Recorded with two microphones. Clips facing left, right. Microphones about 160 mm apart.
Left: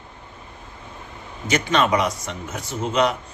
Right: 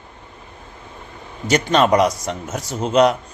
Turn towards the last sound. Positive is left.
turn(degrees=-40)  # may be behind; listen again after turning